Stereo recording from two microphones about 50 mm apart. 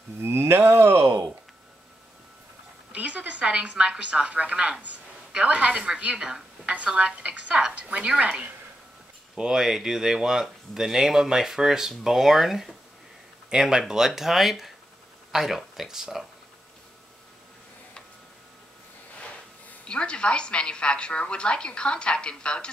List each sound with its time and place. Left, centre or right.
0.2 s a sound: right
2.9 s a woman's voice: right
5.7 s a woman's voice: centre
9.4 s speech: centre
19.8 s a woman's voice: left